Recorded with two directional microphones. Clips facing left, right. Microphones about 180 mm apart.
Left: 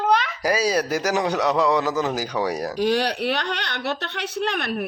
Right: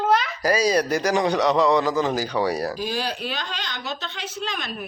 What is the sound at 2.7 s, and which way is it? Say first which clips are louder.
A woman's voice: left 6 dB; 70° left (ahead or behind).